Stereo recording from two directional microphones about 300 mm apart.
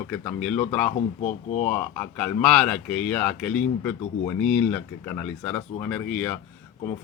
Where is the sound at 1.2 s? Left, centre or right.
Left.